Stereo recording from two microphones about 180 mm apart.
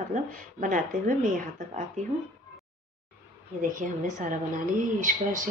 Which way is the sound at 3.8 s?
45° right (ahead or behind).